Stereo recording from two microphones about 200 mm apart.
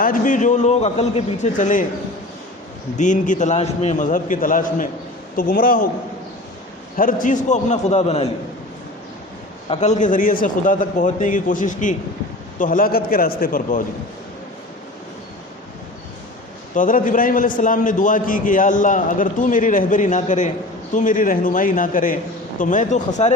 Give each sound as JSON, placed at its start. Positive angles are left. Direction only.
{"t": 0.0, "sound": "a man's voice", "side_deg": 40}
{"t": 2.9, "sound": "a man's voice", "side_deg": 40}
{"t": 6.9, "sound": "a man's voice", "side_deg": 40}
{"t": 9.6, "sound": "a man's voice", "side_deg": 35}
{"t": 16.7, "sound": "a man's voice", "side_deg": 40}